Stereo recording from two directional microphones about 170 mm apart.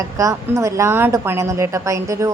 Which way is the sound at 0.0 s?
20° right (ahead or behind).